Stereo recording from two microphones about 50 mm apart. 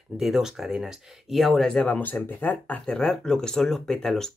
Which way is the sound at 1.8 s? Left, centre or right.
Left.